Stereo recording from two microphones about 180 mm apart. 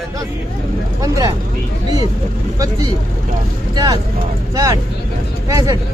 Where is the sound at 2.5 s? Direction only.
20° right (ahead or behind).